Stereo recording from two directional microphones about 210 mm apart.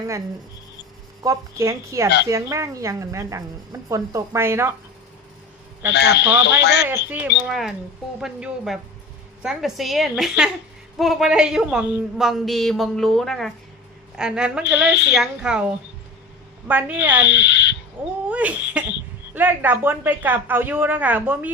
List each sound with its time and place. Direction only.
1.2 s a woman's voice: 15° right (ahead or behind)
5.9 s a man's voice: 55° left (ahead or behind)
6.8 s a woman's voice: 10° right (ahead or behind)
14.8 s a man's voice: 55° left (ahead or behind)
15.1 s a woman's voice: 5° right (ahead or behind)
17.2 s speech: 55° left (ahead or behind)
18.3 s speech: 5° right (ahead or behind)